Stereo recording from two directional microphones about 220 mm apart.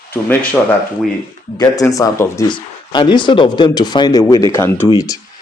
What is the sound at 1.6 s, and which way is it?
Speech, 15° left (ahead or behind).